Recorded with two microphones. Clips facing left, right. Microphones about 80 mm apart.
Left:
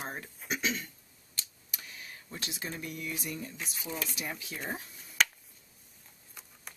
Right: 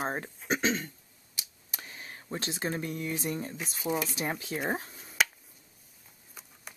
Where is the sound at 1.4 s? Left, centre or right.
Centre.